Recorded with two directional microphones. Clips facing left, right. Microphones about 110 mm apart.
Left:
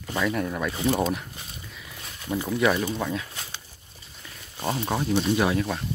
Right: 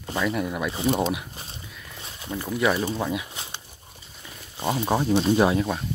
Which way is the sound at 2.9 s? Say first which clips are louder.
Right 1 dB; 15° right (ahead or behind).